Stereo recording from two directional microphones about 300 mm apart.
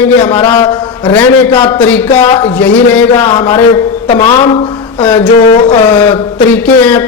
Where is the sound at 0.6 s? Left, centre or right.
Centre.